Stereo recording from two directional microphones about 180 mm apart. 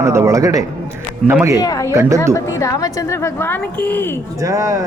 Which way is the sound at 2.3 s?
15° left (ahead or behind).